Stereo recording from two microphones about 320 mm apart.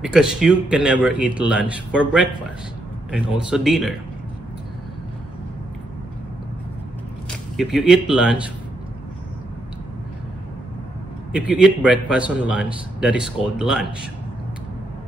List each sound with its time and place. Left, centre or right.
0.0 s a man's voice: centre
7.5 s a man's voice: centre
11.3 s a man's voice: centre